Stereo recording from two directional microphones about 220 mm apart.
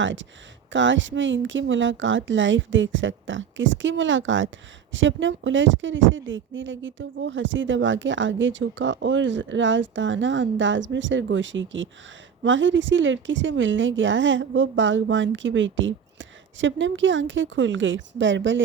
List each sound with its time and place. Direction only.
0.0 s speech: 60° right (ahead or behind)